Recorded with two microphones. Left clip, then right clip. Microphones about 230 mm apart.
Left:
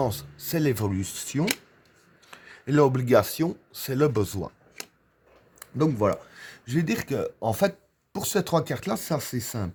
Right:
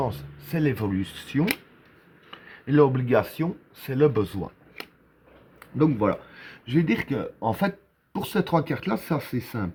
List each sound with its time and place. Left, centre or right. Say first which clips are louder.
0.0 s speech: left 1 dB; left
5.5 s speech: right 2 dB; left